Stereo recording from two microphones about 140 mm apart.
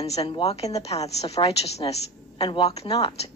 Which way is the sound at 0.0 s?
45° left (ahead or behind).